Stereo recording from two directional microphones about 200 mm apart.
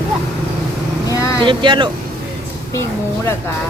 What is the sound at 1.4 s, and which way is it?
Speech, 25° right (ahead or behind).